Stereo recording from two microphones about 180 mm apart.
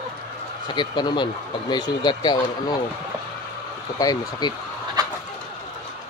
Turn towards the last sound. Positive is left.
turn(degrees=-20)  # may be behind; listen again after turning